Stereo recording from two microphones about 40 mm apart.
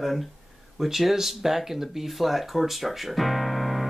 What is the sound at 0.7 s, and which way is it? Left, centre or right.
Speech, centre.